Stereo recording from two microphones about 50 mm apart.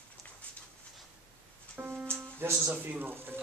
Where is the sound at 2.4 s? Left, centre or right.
Right.